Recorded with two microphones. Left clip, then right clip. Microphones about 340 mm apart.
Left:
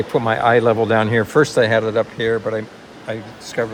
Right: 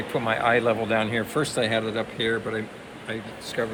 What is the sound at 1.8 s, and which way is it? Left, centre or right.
Speech, left.